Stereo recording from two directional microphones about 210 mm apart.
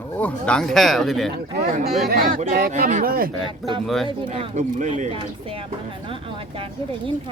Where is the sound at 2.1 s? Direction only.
40° right (ahead or behind).